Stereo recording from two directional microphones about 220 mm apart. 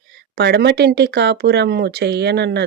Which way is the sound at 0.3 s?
50° right (ahead or behind).